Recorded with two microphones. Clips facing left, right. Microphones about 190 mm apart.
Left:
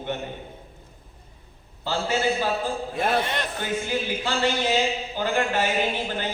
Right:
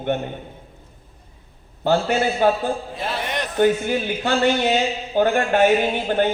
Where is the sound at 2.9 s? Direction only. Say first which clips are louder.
Left 3 dB; 50° left (ahead or behind).